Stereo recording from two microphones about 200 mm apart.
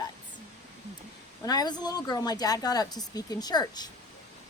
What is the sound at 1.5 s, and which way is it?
Speech, 20° left (ahead or behind).